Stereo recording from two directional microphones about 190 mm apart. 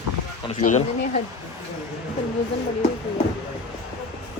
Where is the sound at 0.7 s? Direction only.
35° left (ahead or behind).